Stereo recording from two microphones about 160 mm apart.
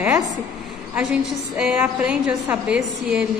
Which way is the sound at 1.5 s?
10° right (ahead or behind).